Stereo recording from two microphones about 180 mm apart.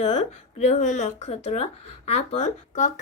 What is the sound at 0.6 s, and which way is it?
Speech, 40° left (ahead or behind).